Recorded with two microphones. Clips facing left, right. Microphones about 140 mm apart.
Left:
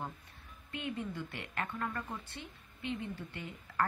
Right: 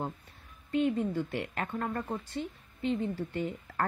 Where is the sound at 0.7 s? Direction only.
45° right (ahead or behind).